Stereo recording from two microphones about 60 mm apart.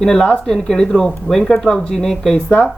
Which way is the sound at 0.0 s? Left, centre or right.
Centre.